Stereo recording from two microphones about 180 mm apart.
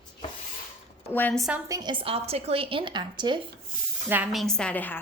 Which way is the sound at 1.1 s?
10° left (ahead or behind).